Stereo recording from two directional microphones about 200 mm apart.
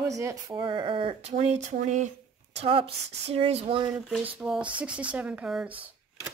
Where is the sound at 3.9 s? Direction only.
5° right (ahead or behind).